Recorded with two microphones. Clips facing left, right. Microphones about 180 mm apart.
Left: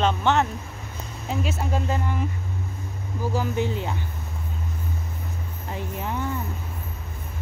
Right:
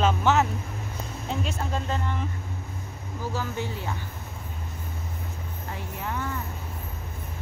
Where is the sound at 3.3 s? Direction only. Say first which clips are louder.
Left 7 dB; 20° left (ahead or behind).